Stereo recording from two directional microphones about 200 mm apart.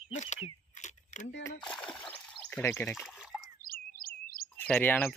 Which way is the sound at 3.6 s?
45° left (ahead or behind).